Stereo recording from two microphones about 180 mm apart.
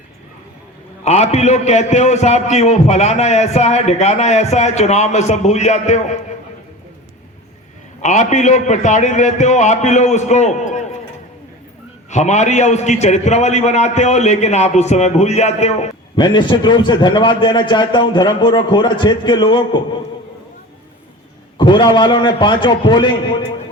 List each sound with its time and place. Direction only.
1.0 s a man's voice: 40° left (ahead or behind)
8.0 s a man's voice: 45° left (ahead or behind)
12.1 s a man's voice: 40° left (ahead or behind)
16.1 s a man's voice: 25° left (ahead or behind)
21.6 s a man's voice: 25° left (ahead or behind)